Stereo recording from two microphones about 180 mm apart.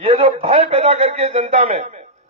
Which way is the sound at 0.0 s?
30° right (ahead or behind).